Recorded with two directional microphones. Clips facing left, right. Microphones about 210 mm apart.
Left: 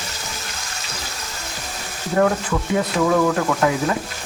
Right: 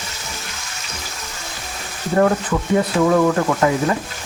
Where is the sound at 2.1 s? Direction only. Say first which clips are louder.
Right 2 dB; 5° right (ahead or behind).